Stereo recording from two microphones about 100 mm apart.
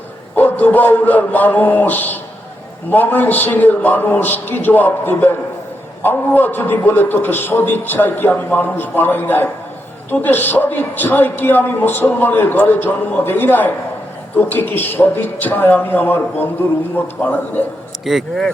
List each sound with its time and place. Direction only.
0.3 s a man's voice: 15° left (ahead or behind)
18.0 s a man's voice: centre (ahead or behind)